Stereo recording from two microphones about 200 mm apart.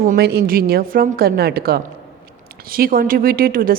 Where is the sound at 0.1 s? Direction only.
50° right (ahead or behind).